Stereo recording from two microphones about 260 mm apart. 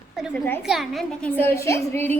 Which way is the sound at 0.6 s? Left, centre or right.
Centre.